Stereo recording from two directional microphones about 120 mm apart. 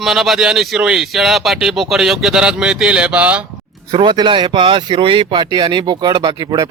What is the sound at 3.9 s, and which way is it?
Speech, 40° right (ahead or behind).